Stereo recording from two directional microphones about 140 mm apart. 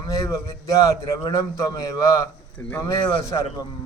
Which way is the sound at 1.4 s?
25° left (ahead or behind).